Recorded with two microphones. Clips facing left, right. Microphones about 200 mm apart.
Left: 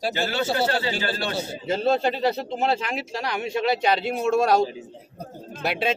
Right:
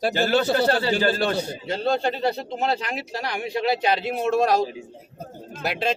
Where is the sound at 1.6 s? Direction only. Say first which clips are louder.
Left 3 dB; centre (ahead or behind).